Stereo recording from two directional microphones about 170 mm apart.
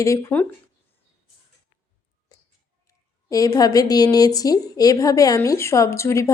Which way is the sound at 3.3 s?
20° left (ahead or behind).